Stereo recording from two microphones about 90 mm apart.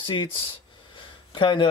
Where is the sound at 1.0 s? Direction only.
65° left (ahead or behind).